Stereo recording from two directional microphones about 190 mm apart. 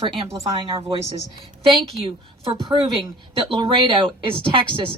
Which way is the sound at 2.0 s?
25° right (ahead or behind).